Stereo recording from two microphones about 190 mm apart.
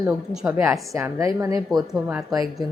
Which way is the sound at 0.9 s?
15° right (ahead or behind).